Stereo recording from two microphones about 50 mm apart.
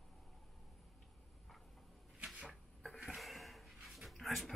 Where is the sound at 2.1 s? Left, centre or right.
Right.